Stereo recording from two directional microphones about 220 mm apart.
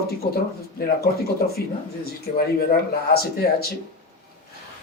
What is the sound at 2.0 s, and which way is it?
Speech, 45° left (ahead or behind).